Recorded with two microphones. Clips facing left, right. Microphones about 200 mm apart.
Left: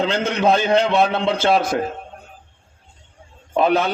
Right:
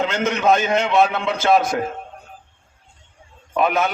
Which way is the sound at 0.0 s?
30° left (ahead or behind).